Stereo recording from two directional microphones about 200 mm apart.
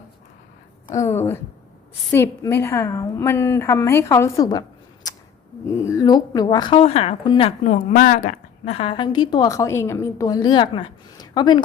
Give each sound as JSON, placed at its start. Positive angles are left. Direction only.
{"t": 0.9, "sound": "a woman's voice", "side_deg": 15}
{"t": 5.0, "sound": "a sound", "side_deg": 20}
{"t": 5.6, "sound": "speech", "side_deg": 15}